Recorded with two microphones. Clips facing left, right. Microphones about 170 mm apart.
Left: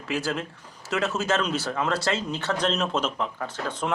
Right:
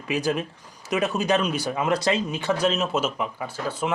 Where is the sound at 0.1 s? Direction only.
15° right (ahead or behind).